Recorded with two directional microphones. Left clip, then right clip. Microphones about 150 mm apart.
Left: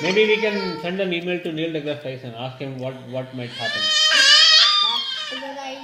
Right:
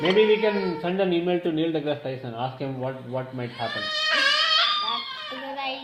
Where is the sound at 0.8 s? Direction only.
35° right (ahead or behind).